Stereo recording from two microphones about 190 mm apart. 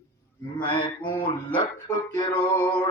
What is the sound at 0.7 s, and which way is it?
Music, 25° left (ahead or behind).